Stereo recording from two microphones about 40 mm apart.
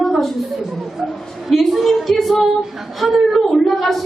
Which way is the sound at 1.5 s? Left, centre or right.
Centre.